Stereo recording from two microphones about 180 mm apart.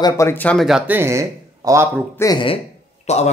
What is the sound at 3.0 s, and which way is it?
Speech, 40° left (ahead or behind).